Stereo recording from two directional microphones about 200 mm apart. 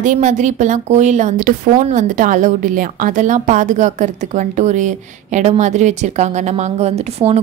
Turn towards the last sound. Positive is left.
turn(degrees=-30)  # may be behind; listen again after turning